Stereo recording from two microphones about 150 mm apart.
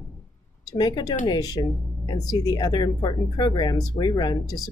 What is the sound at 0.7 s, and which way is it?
Speech, 30° left (ahead or behind).